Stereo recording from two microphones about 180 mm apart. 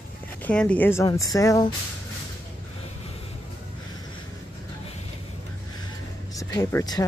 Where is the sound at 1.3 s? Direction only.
20° left (ahead or behind).